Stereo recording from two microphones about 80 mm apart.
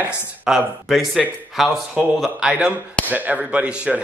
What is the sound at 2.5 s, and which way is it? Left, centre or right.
Speech, centre.